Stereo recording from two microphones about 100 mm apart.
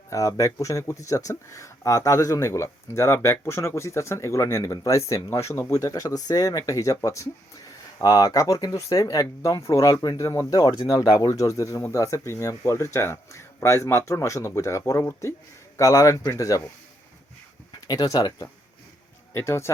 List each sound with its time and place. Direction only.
0.1 s speech: 30° left (ahead or behind)
17.8 s speech: 40° left (ahead or behind)
19.3 s speech: 25° left (ahead or behind)